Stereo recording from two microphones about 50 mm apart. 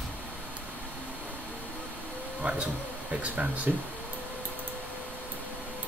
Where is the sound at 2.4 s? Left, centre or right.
Right.